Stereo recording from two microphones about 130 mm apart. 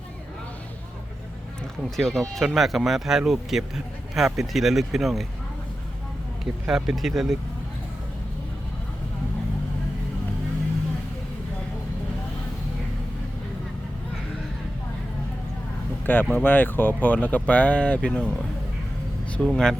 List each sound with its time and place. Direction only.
2.0 s speech: centre (ahead or behind)
6.4 s speech: 5° right (ahead or behind)
16.0 s speech: 15° left (ahead or behind)
19.4 s speech: 5° left (ahead or behind)